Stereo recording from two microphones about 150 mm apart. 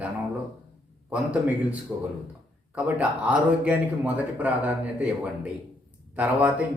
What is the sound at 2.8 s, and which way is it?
Speech, 10° right (ahead or behind).